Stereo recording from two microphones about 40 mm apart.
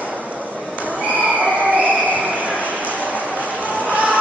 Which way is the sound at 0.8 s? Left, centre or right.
Right.